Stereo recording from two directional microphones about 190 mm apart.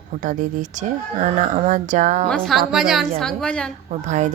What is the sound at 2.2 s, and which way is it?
A woman's voice, 5° left (ahead or behind).